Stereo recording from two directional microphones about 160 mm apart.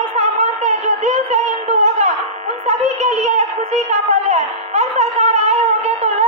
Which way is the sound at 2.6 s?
45° right (ahead or behind).